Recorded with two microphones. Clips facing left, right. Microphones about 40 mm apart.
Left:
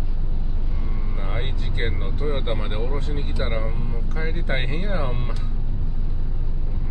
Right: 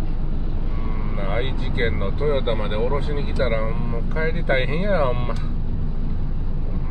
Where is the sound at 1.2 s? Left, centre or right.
Centre.